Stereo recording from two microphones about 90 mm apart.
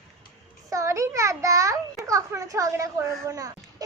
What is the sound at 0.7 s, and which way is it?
A child's voice, 35° right (ahead or behind).